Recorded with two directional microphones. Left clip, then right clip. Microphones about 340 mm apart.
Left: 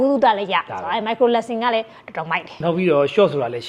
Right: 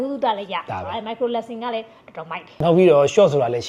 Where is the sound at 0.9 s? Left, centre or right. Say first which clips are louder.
Left 8 dB; left.